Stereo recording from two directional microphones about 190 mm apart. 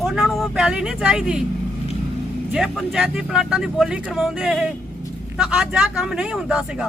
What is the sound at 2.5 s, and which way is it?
Speech, centre (ahead or behind).